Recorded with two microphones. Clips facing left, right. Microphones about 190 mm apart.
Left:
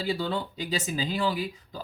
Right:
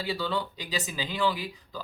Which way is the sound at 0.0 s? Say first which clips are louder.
Left 1 dB; 45° left (ahead or behind).